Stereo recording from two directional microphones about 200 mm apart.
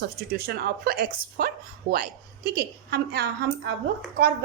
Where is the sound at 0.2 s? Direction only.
50° right (ahead or behind).